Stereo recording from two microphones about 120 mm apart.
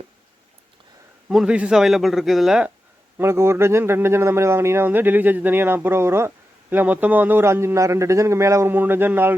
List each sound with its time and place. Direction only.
1.3 s a man's voice: 5° right (ahead or behind)
3.2 s speech: 20° right (ahead or behind)